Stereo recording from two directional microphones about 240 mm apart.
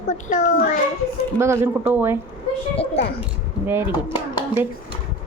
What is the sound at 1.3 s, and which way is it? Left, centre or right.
Speech, centre.